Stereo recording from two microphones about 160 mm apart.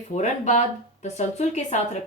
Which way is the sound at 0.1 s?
45° left (ahead or behind).